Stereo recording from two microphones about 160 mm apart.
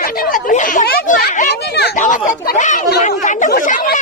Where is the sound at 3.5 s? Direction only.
65° left (ahead or behind).